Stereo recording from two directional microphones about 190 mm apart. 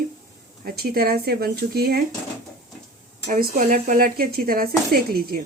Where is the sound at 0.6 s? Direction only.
55° right (ahead or behind).